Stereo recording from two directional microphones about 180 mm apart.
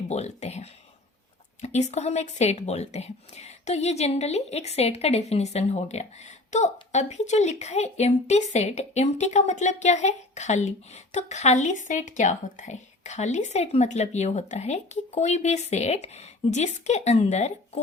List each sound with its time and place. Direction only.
0.1 s speech: 40° left (ahead or behind)